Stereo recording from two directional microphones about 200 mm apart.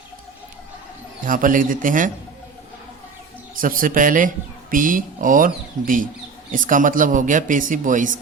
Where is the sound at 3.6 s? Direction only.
45° right (ahead or behind).